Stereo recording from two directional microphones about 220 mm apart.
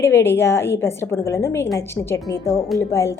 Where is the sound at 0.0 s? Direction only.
10° left (ahead or behind).